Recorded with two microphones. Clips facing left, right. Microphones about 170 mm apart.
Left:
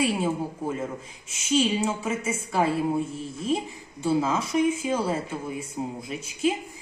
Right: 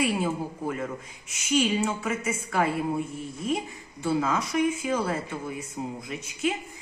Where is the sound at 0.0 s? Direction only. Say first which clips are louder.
Left 1 dB; 30° left (ahead or behind).